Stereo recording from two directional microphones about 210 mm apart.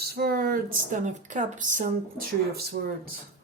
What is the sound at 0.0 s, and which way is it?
Speech, 45° right (ahead or behind).